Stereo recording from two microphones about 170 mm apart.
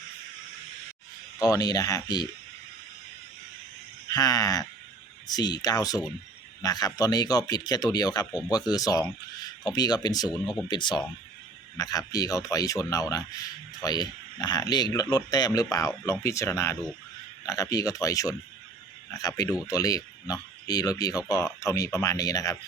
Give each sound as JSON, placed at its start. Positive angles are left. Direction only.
{"t": 1.4, "sound": "speech", "side_deg": 20}
{"t": 4.1, "sound": "speech", "side_deg": 20}
{"t": 10.3, "sound": "speech", "side_deg": 0}
{"t": 10.7, "sound": "speech", "side_deg": 25}